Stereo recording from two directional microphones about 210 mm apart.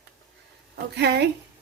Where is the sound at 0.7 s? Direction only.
50° right (ahead or behind).